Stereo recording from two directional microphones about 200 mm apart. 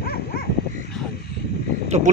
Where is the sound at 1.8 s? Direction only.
35° right (ahead or behind).